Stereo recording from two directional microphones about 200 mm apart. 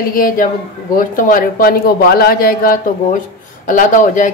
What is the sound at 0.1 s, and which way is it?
A man's voice, 45° left (ahead or behind).